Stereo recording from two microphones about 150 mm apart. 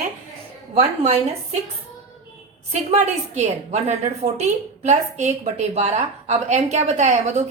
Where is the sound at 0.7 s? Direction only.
45° right (ahead or behind).